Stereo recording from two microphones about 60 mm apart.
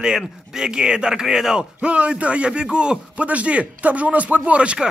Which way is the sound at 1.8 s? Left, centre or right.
Centre.